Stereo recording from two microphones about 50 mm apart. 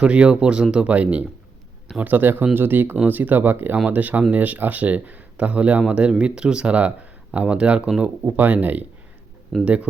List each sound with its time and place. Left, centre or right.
0.0 s speech: right
2.0 s speech: right
8.2 s speech: right
9.5 s speech: centre